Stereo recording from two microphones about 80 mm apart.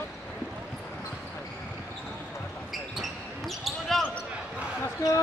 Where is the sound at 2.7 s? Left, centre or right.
Centre.